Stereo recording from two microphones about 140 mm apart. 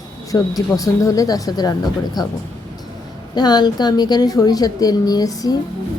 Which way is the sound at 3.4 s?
30° left (ahead or behind).